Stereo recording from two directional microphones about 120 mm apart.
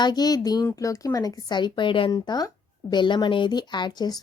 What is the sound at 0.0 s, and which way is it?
Speech, 35° left (ahead or behind).